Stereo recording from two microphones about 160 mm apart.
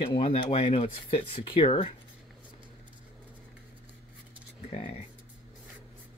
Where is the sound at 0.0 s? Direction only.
35° left (ahead or behind).